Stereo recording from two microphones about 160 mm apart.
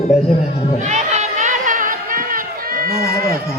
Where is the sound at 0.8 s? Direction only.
45° right (ahead or behind); by 3.4 s 70° right (ahead or behind).